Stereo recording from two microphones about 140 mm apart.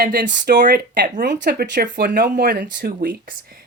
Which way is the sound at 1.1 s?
65° right (ahead or behind).